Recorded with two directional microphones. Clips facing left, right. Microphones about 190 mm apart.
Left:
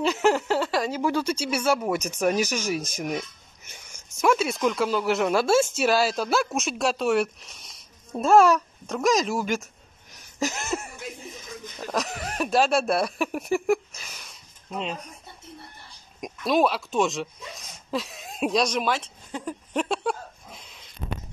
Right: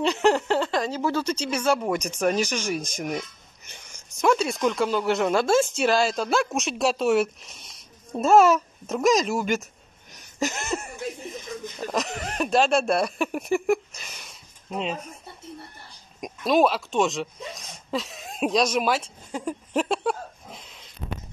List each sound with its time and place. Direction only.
0.0 s speech: 5° left (ahead or behind)
10.1 s chuckle: centre (ahead or behind)
11.9 s speech: centre (ahead or behind)
16.2 s speech: centre (ahead or behind)